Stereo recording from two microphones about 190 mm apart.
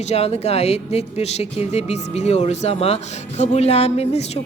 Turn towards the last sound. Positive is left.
turn(degrees=35)  # may be behind; listen again after turning